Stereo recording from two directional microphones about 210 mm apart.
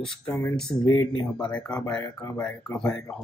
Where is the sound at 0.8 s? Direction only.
20° left (ahead or behind).